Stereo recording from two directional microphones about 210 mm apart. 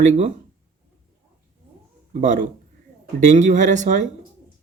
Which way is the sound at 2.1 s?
35° right (ahead or behind).